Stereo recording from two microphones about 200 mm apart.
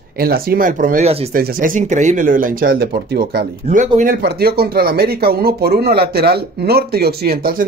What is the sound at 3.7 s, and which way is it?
Speech, 40° right (ahead or behind).